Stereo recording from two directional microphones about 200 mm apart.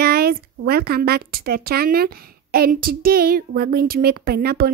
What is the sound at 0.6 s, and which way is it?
A woman's voice, 50° right (ahead or behind).